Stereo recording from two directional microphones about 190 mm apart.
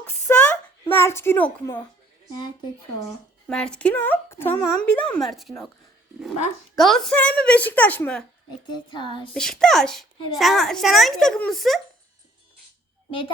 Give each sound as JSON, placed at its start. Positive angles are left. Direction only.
{"t": 0.3, "sound": "a sound", "side_deg": 10}
{"t": 3.5, "sound": "a woman's voice", "side_deg": 5}
{"t": 6.7, "sound": "a woman's voice", "side_deg": 0}
{"t": 8.7, "sound": "child singing", "side_deg": 25}
{"t": 9.3, "sound": "a woman's voice", "side_deg": 5}
{"t": 13.1, "sound": "a child's voice", "side_deg": 25}